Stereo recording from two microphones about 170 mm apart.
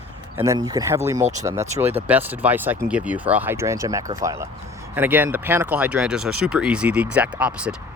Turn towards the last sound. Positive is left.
turn(degrees=-5)  # may be behind; listen again after turning